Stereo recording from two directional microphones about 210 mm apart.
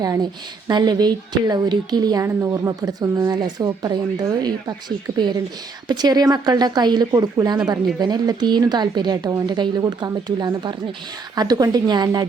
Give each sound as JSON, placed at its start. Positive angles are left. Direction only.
{"t": 0.0, "sound": "a woman's voice", "side_deg": -15}